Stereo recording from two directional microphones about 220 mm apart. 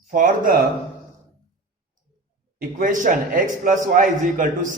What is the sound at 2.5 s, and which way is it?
A man's voice, 40° right (ahead or behind).